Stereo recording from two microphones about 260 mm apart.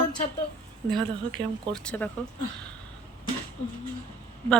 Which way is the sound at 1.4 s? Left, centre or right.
Centre.